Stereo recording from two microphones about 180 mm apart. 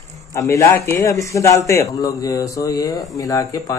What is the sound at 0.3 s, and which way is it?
A man's voice, 15° left (ahead or behind).